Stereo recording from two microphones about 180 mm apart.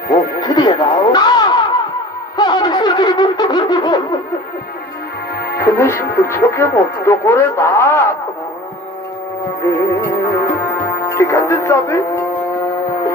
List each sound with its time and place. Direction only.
0.4 s music: 20° left (ahead or behind)
2.3 s wind instrument: 25° left (ahead or behind)
5.6 s speech: 10° left (ahead or behind)
9.6 s speech: 15° left (ahead or behind)
10.6 s music: 15° left (ahead or behind)